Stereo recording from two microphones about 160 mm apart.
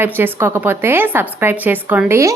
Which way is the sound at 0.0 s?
15° right (ahead or behind).